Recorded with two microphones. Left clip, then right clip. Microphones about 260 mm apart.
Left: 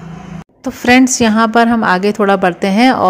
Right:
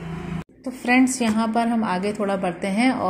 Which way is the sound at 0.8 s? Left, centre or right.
Left.